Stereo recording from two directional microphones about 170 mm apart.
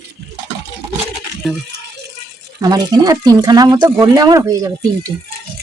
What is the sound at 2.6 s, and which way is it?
Speech, 20° right (ahead or behind).